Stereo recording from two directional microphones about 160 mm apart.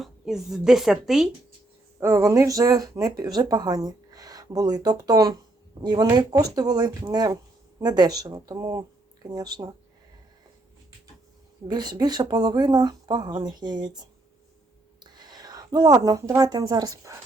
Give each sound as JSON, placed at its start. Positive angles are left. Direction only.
{"t": 0.0, "sound": "speech", "side_deg": 0}
{"t": 2.0, "sound": "speech", "side_deg": -15}
{"t": 11.7, "sound": "speech", "side_deg": -25}
{"t": 15.0, "sound": "a woman's voice", "side_deg": -25}